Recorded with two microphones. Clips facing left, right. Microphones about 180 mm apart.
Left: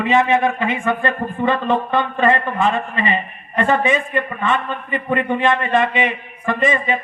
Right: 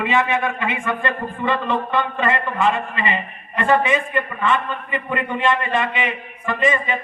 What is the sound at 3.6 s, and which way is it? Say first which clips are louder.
A man's voice: left 1 dB; 45° left (ahead or behind).